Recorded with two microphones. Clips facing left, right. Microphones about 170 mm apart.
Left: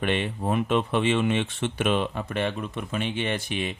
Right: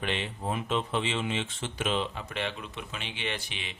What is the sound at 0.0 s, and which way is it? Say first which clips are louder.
Speech: left 6 dB; 60° left (ahead or behind).